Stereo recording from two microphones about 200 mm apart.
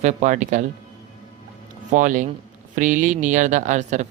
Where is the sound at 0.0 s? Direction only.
35° right (ahead or behind).